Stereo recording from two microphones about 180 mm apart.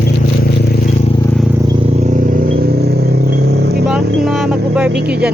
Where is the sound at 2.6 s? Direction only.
60° right (ahead or behind).